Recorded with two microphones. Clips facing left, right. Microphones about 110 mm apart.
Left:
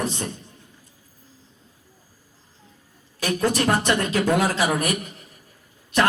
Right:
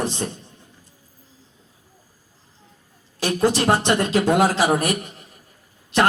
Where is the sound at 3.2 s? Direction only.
30° right (ahead or behind).